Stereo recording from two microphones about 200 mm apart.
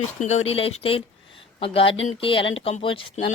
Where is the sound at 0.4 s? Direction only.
30° left (ahead or behind).